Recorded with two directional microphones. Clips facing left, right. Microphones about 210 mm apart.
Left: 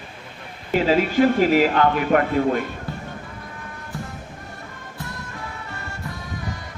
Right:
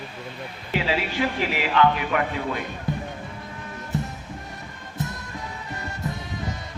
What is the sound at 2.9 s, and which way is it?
Music, 20° right (ahead or behind).